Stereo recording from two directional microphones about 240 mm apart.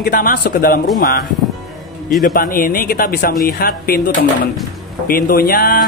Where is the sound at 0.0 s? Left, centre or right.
Left.